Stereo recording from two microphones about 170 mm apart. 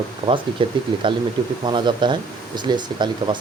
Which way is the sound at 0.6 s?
30° right (ahead or behind).